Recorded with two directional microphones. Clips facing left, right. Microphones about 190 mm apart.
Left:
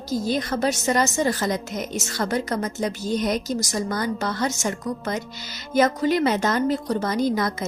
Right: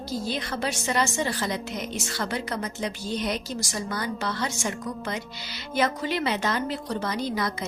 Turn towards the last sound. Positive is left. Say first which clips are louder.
# left 6 dB
turn(degrees=45)  # may be behind; listen again after turning